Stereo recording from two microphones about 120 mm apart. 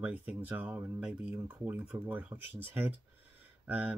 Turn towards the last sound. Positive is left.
turn(degrees=-10)  # may be behind; listen again after turning